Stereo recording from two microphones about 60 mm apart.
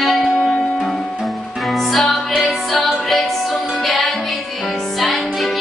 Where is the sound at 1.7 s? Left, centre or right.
Centre.